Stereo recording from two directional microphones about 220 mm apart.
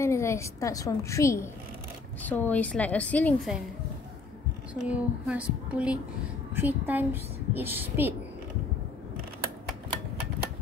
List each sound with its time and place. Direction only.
0.0 s a woman's voice: 10° left (ahead or behind)
4.8 s a woman's voice: 5° right (ahead or behind)